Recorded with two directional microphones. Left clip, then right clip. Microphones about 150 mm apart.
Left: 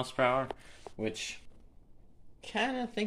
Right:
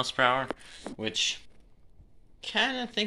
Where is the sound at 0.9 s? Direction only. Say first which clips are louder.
Right 7 dB; 10° left (ahead or behind).